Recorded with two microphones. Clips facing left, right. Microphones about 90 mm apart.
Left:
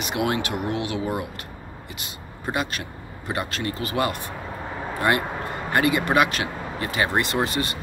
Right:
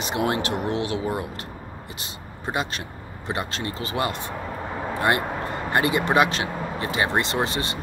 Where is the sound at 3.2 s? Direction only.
25° right (ahead or behind).